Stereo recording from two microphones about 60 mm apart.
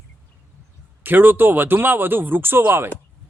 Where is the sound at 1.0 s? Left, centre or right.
Right.